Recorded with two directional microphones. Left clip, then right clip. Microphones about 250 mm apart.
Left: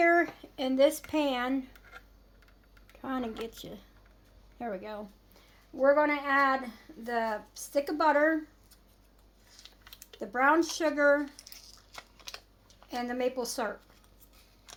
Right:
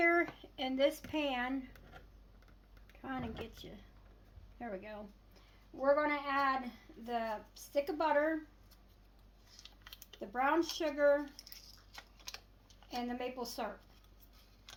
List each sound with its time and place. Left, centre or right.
0.0 s speech: left
3.0 s speech: left
9.6 s a sound: centre
10.2 s speech: left
11.3 s a sound: centre
12.9 s speech: left